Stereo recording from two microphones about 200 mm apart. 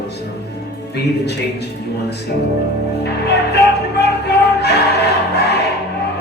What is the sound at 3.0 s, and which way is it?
Music, 55° left (ahead or behind).